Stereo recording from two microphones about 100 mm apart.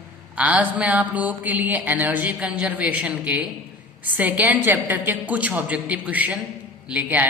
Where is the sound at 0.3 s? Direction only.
15° right (ahead or behind).